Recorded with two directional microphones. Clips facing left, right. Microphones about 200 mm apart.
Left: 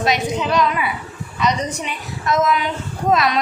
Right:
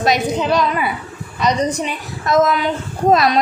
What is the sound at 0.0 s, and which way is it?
A woman's voice, 40° right (ahead or behind).